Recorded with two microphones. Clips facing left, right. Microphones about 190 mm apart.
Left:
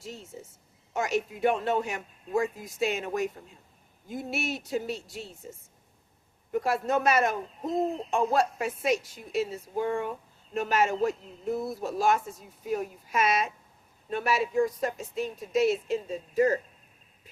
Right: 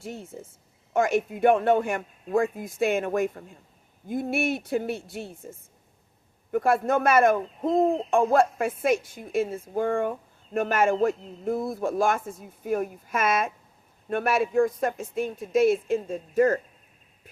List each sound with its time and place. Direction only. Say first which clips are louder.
0.0 s speech: right 4 dB; 55° right (ahead or behind)